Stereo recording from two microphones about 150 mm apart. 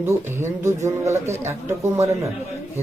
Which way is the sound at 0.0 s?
15° right (ahead or behind).